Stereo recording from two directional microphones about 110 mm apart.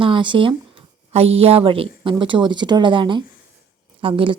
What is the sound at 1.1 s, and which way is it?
A woman's voice, 65° right (ahead or behind).